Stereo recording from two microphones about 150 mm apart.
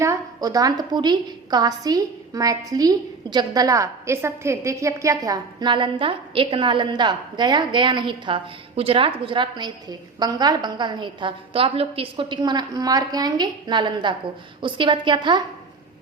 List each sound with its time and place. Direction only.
0.0 s a woman's voice: 20° right (ahead or behind)